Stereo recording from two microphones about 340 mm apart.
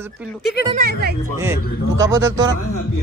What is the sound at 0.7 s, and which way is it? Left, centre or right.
Speech, right.